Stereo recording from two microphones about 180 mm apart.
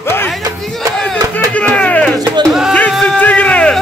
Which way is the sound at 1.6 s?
5° left (ahead or behind).